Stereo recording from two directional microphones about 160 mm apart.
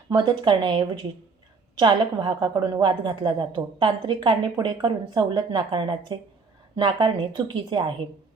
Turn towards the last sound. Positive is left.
turn(degrees=-30)  # may be behind; listen again after turning